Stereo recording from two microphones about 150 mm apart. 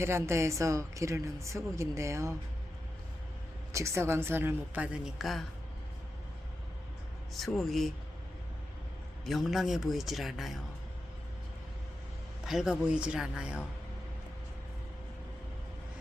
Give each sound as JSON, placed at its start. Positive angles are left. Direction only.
{"t": 0.0, "sound": "a woman's voice", "side_deg": -20}
{"t": 3.7, "sound": "a woman's voice", "side_deg": -20}
{"t": 7.3, "sound": "speech", "side_deg": 0}
{"t": 9.2, "sound": "speech", "side_deg": 0}
{"t": 12.5, "sound": "a woman's voice", "side_deg": -5}